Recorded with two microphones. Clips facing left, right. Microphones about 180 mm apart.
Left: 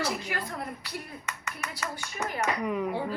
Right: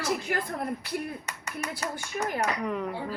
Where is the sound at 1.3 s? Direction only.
35° right (ahead or behind).